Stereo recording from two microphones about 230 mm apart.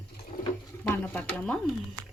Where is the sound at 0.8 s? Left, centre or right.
Centre.